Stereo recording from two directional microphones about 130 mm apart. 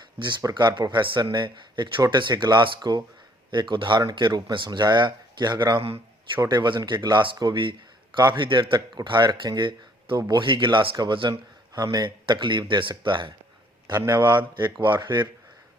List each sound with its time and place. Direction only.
0.2 s speech: 35° right (ahead or behind)
5.8 s a man's voice: 50° right (ahead or behind)
6.4 s speech: 35° right (ahead or behind)
14.5 s speech: 35° right (ahead or behind)